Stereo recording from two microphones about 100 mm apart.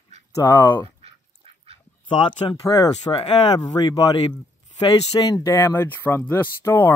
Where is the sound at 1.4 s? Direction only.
70° right (ahead or behind).